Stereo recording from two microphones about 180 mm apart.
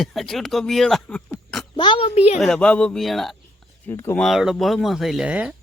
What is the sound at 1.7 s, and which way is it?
Speech, 25° left (ahead or behind).